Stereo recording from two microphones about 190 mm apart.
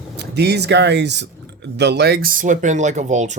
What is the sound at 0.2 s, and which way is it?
Speech, 60° right (ahead or behind).